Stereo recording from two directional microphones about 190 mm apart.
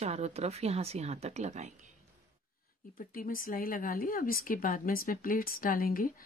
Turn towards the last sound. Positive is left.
turn(degrees=50)  # may be behind; listen again after turning